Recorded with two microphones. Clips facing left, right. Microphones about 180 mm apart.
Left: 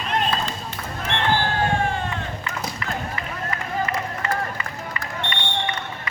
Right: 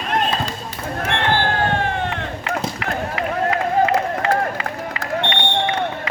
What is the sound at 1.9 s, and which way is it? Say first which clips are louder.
Run: right 4 dB; 65° right (ahead or behind).